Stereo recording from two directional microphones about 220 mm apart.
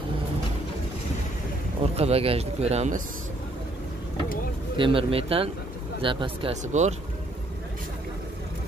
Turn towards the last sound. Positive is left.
turn(degrees=-30)  # may be behind; listen again after turning